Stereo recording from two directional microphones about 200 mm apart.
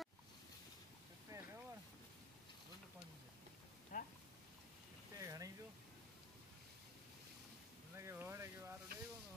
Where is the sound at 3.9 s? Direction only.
40° left (ahead or behind).